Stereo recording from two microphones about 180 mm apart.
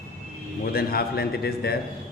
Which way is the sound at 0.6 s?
55° left (ahead or behind).